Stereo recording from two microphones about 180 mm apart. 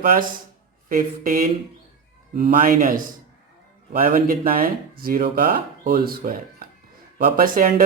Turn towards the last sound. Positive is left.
turn(degrees=-50)  # may be behind; listen again after turning